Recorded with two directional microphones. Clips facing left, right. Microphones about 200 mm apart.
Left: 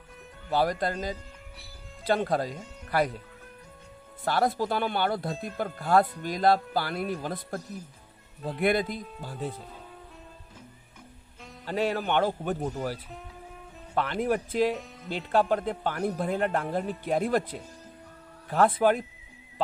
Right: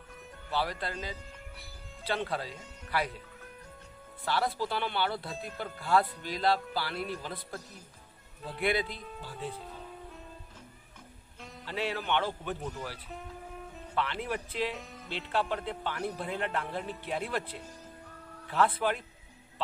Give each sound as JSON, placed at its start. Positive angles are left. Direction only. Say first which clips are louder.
{"t": 0.5, "sound": "speech", "louder": "left 7 dB", "side_deg": 45}
{"t": 4.2, "sound": "speech", "louder": "left 5 dB", "side_deg": 50}
{"t": 11.6, "sound": "speech", "louder": "left 6 dB", "side_deg": 45}